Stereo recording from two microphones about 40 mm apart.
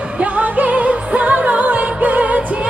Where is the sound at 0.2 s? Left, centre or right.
Right.